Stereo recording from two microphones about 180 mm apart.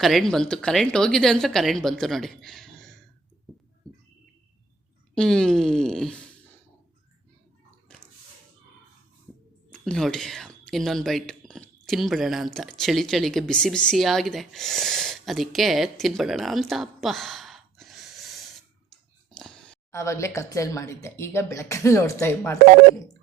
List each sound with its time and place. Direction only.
0.0 s a woman's voice: centre (ahead or behind)
5.1 s a woman's voice: 5° left (ahead or behind)
7.9 s drip: 5° left (ahead or behind)
9.7 s speech: 5° left (ahead or behind)
19.4 s a sound: 5° left (ahead or behind)
19.9 s speech: 15° left (ahead or behind)